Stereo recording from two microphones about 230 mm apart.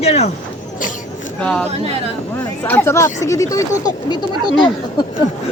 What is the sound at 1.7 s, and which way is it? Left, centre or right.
Speech, right.